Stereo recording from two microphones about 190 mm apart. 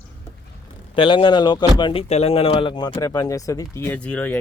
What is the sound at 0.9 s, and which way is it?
Speech, 25° left (ahead or behind).